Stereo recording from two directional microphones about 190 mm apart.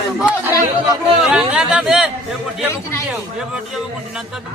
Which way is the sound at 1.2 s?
5° right (ahead or behind).